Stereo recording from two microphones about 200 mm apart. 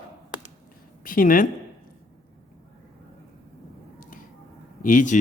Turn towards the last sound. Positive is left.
turn(degrees=40)  # may be behind; listen again after turning